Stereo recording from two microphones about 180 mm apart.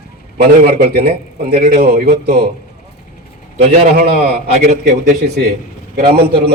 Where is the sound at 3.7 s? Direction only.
45° right (ahead or behind).